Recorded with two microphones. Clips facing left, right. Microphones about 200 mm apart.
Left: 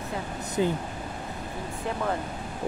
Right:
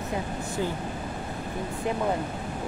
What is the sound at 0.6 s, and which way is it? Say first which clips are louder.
Speech: left 5 dB; 20° left (ahead or behind).